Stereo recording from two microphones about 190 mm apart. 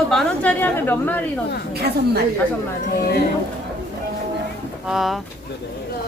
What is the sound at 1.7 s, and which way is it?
Speech, 55° right (ahead or behind).